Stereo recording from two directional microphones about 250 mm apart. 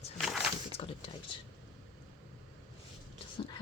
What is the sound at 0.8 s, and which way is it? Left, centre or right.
Speech, left.